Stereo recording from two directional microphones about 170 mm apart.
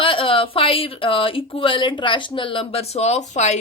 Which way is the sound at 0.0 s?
30° left (ahead or behind).